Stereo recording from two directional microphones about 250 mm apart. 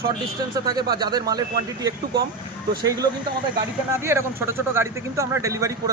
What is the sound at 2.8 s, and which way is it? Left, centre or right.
A man's voice, centre.